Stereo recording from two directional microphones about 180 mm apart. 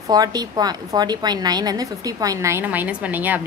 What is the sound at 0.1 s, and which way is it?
A woman's voice, 20° right (ahead or behind).